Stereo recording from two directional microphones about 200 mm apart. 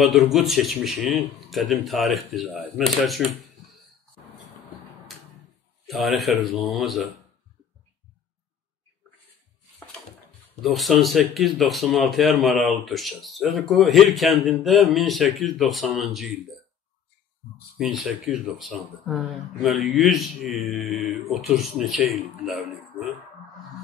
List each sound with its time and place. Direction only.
0.0 s speech: centre (ahead or behind)
5.9 s speech: centre (ahead or behind)
10.6 s speech: centre (ahead or behind)
17.7 s speech: centre (ahead or behind)